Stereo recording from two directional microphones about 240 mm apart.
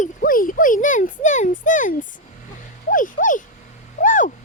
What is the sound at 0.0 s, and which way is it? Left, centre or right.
A child's voice, left.